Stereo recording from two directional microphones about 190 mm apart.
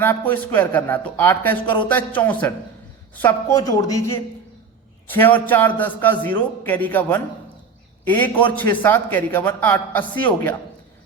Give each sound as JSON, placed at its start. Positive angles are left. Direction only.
{"t": 0.0, "sound": "a man's voice", "side_deg": 10}